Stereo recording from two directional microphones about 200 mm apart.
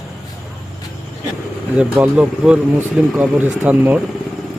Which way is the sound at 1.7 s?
5° right (ahead or behind).